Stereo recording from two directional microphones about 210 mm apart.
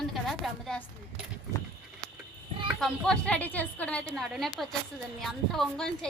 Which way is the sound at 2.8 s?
5° left (ahead or behind).